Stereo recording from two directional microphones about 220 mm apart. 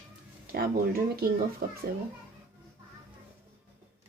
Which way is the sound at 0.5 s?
45° right (ahead or behind).